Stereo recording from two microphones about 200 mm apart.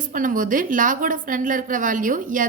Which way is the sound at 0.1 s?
40° right (ahead or behind).